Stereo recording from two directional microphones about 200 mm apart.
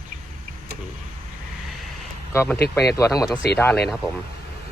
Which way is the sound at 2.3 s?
10° left (ahead or behind).